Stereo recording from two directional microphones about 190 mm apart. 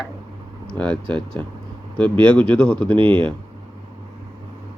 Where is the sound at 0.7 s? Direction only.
5° left (ahead or behind).